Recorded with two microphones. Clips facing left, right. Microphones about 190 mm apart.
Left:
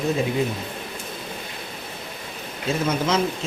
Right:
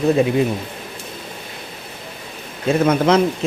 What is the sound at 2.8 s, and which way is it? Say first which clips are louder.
Speech: right 8 dB; 60° right (ahead or behind).